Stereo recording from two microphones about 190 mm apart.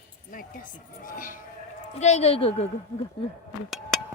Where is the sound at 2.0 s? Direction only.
35° left (ahead or behind).